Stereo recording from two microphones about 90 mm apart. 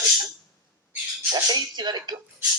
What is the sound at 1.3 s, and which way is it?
Speech, 50° right (ahead or behind).